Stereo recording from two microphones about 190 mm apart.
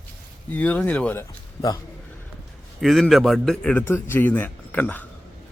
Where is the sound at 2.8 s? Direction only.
Centre (ahead or behind).